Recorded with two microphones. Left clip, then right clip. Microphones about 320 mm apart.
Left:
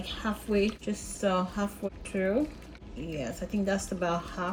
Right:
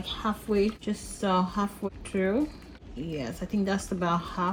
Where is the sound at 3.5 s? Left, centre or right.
Right.